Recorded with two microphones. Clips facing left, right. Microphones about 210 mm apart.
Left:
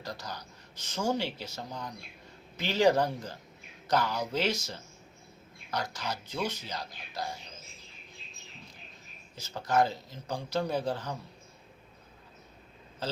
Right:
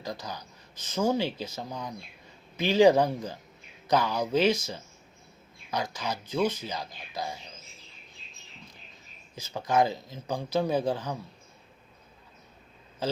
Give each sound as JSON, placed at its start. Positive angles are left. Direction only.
{"t": 0.0, "sound": "speech", "side_deg": -10}
{"t": 9.3, "sound": "speech", "side_deg": -10}